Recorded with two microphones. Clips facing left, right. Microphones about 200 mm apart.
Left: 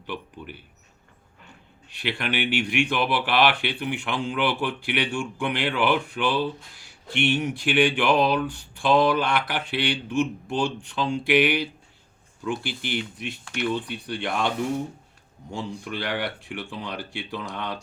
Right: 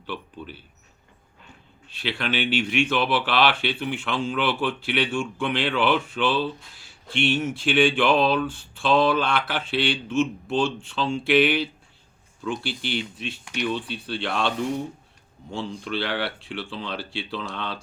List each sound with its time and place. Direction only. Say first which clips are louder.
0.1 s speech: even; 15° left (ahead or behind)
1.9 s speech: right 1 dB; 15° left (ahead or behind)
13.4 s speech: even; 15° right (ahead or behind)
13.7 s speech: even; 15° left (ahead or behind)
15.5 s speech: right 2 dB; 15° left (ahead or behind)